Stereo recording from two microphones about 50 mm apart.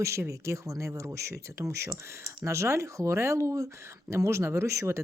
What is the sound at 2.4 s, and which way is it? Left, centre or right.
Speech, right.